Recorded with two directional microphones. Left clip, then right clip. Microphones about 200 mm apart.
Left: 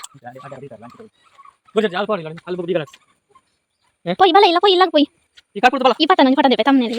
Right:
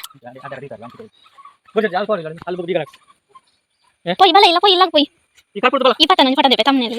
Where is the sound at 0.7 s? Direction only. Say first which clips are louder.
Right 4 dB; 35° right (ahead or behind).